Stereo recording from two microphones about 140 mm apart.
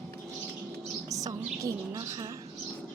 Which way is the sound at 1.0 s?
25° right (ahead or behind).